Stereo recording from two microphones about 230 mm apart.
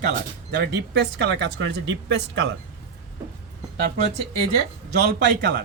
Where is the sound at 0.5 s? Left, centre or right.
Right.